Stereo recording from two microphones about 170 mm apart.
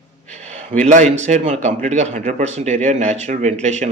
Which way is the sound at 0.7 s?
50° right (ahead or behind).